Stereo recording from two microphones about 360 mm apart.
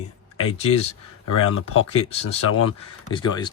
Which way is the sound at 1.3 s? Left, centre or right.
Left.